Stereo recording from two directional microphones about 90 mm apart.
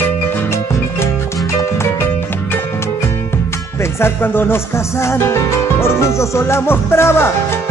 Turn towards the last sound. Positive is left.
turn(degrees=25)  # may be behind; listen again after turning